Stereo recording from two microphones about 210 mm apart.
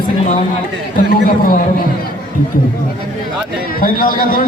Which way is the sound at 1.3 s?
45° left (ahead or behind).